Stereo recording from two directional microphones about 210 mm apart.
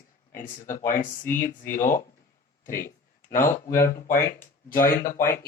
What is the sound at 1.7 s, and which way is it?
Speech, 40° left (ahead or behind).